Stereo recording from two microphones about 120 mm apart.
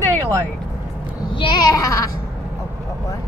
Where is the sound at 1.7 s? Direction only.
30° left (ahead or behind).